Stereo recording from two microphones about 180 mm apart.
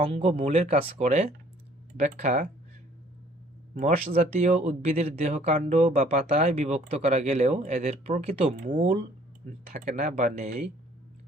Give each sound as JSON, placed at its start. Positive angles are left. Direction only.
{"t": 0.0, "sound": "speech", "side_deg": -35}
{"t": 3.8, "sound": "speech", "side_deg": -45}